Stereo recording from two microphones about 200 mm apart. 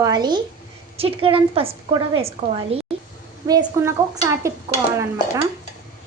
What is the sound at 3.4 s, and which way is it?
A woman's voice, 15° right (ahead or behind).